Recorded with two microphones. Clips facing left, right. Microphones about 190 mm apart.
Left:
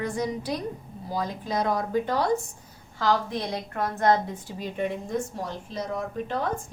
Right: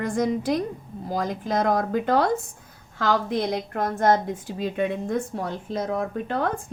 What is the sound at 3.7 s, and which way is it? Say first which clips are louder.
Speech: right 1 dB; 45° right (ahead or behind).